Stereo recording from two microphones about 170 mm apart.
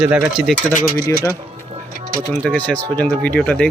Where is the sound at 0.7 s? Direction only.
55° left (ahead or behind).